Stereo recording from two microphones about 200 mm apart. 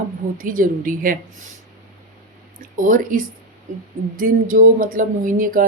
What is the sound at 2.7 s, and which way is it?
Speech, 40° right (ahead or behind).